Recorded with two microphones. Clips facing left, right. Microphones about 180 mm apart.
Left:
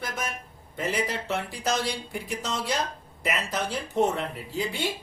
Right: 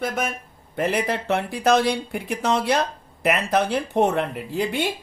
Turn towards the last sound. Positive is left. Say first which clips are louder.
# right 6 dB
turn(degrees=-60)  # may be behind; listen again after turning